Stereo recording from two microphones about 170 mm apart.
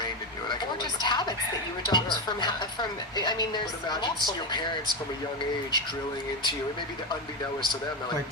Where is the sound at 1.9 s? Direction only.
25° left (ahead or behind).